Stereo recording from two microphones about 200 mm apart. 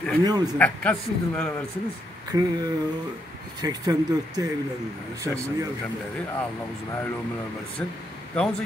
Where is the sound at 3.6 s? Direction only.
20° right (ahead or behind).